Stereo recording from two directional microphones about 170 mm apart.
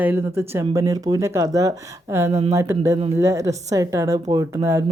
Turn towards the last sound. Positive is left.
turn(degrees=-20)  # may be behind; listen again after turning